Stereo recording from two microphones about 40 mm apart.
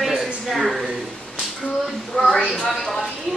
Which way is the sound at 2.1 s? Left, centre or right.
Centre.